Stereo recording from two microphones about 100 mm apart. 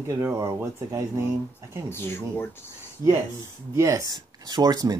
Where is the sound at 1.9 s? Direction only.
25° left (ahead or behind).